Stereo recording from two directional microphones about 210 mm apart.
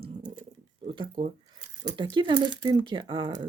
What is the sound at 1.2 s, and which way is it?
Speech, 25° right (ahead or behind).